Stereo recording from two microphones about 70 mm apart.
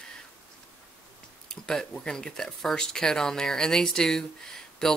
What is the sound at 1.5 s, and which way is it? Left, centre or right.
Speech, centre.